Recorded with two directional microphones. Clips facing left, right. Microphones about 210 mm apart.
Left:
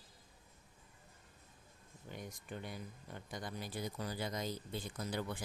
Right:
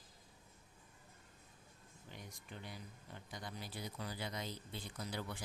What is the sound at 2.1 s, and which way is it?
Speech, 50° left (ahead or behind).